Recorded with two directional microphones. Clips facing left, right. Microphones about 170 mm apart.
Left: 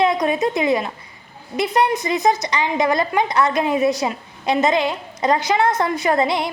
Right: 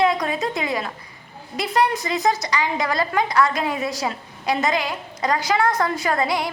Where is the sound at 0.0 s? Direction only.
20° left (ahead or behind).